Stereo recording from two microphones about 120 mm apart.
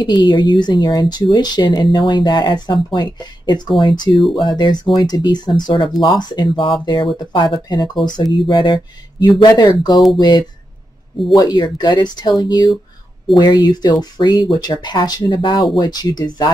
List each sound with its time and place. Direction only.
0.0 s speech: 40° left (ahead or behind)